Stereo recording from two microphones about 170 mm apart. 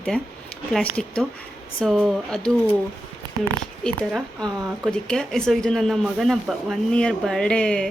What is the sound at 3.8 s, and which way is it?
A woman's voice, 5° left (ahead or behind).